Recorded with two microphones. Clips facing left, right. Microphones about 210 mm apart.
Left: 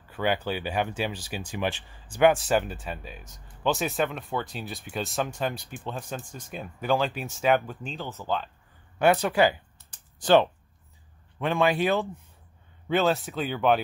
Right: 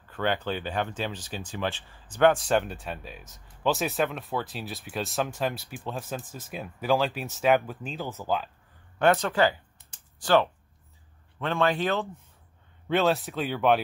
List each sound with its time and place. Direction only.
0.1 s speech: 10° left (ahead or behind); by 8.5 s 10° right (ahead or behind)
8.9 s speech: 10° left (ahead or behind)
12.8 s speech: centre (ahead or behind)